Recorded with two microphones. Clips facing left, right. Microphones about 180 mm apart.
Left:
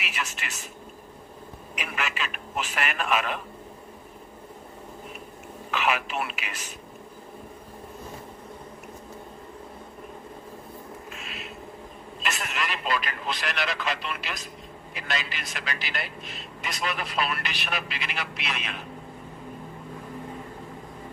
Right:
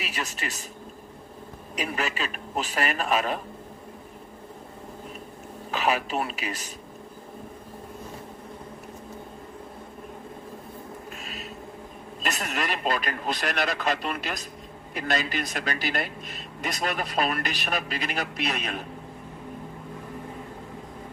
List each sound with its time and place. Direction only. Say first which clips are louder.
0.0 s a man's voice: right 2 dB; 35° right (ahead or behind)
1.7 s a man's voice: right 4 dB; 35° right (ahead or behind)
5.7 s a man's voice: right 2 dB; 35° right (ahead or behind)
11.2 s a sound: right 1 dB; 40° right (ahead or behind)
12.2 s a man's voice: right 2 dB; 40° right (ahead or behind)